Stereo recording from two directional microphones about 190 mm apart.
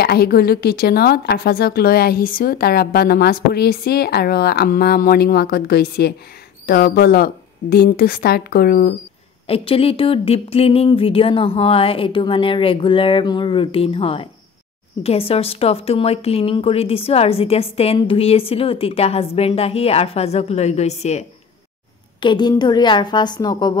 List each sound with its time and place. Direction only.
0.0 s speech: 55° left (ahead or behind)
9.5 s speech: 30° left (ahead or behind)
22.2 s speech: 25° left (ahead or behind)